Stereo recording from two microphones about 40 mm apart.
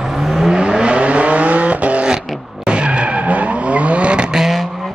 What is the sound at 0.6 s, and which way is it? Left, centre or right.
Vehicle, right.